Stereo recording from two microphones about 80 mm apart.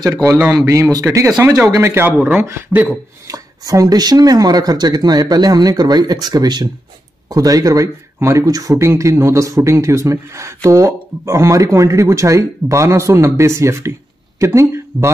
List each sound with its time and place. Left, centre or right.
0.7 s speech: right
2.1 s speech: centre
2.4 s speech: right
3.3 s speech: right